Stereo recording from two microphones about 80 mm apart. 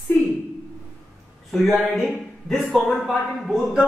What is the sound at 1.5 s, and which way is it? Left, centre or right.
Speech, centre.